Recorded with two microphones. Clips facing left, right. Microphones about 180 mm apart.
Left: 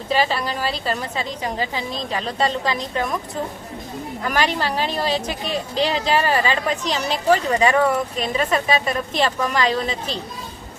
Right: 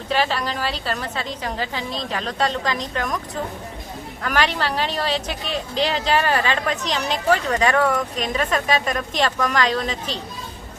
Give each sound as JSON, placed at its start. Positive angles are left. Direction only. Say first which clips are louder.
{"t": 0.1, "sound": "speech", "louder": "left 1 dB", "side_deg": 10}
{"t": 4.2, "sound": "speech", "louder": "even", "side_deg": 10}
{"t": 5.3, "sound": "speech", "louder": "left 2 dB", "side_deg": 40}
{"t": 5.8, "sound": "speech", "louder": "left 1 dB", "side_deg": 10}